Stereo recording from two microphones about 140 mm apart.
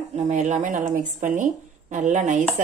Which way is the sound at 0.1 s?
60° right (ahead or behind).